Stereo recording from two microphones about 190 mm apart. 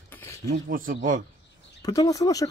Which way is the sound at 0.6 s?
50° right (ahead or behind).